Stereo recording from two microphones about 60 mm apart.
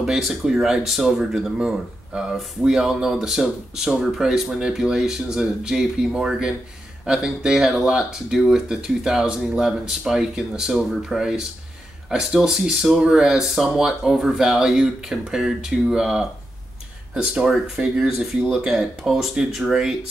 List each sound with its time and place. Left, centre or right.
0.0 s speech: centre